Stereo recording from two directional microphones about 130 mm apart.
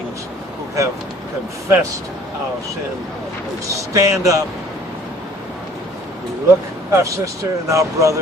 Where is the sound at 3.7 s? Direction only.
25° right (ahead or behind).